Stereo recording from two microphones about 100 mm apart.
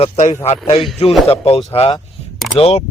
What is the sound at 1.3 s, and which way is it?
Speech, 80° left.